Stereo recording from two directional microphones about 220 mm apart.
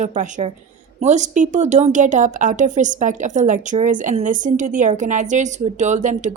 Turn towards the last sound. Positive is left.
turn(degrees=-35)  # may be behind; listen again after turning